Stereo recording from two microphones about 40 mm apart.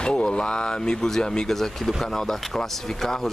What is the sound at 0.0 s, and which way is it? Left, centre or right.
Speech, left.